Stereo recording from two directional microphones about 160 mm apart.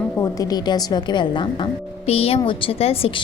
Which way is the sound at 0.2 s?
20° left (ahead or behind).